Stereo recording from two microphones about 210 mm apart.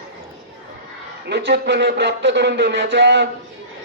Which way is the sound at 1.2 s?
55° right (ahead or behind).